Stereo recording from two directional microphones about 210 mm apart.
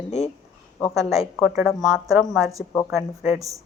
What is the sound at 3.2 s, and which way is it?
Speech, centre (ahead or behind).